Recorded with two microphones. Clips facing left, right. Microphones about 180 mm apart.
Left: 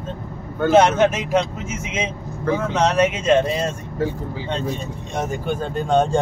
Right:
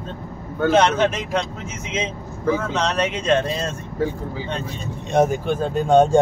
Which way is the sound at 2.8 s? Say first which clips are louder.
Left 4 dB; 10° left (ahead or behind).